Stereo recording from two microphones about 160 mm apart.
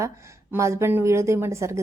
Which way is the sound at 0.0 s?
20° right (ahead or behind).